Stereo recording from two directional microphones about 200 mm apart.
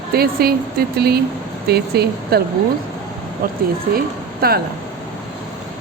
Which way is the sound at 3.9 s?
50° right (ahead or behind).